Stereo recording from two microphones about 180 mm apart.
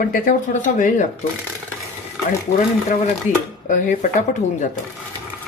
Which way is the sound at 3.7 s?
45° left (ahead or behind).